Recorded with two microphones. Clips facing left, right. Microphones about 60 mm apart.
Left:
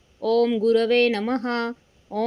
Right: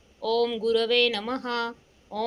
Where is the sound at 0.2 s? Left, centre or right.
Left.